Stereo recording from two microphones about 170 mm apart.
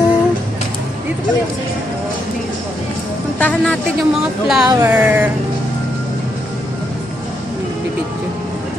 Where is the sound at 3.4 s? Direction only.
10° left (ahead or behind).